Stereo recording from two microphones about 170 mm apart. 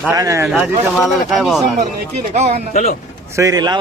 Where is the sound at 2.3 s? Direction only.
40° right (ahead or behind).